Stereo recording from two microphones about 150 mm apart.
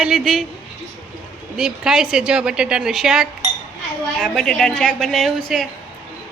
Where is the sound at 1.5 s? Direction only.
5° right (ahead or behind).